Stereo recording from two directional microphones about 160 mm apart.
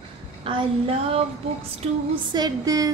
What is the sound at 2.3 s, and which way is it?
Speech, 25° right (ahead or behind).